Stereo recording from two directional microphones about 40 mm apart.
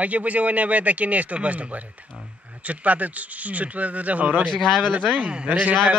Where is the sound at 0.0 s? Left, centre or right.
Right.